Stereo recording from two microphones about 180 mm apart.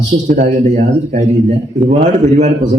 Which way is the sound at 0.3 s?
40° right (ahead or behind).